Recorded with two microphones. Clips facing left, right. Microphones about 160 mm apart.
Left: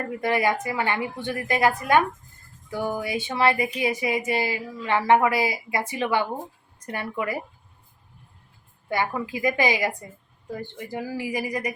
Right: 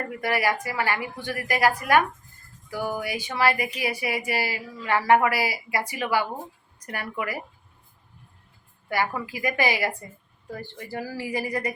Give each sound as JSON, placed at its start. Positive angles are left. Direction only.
{"t": 0.1, "sound": "speech", "side_deg": 20}
{"t": 8.9, "sound": "speech", "side_deg": 20}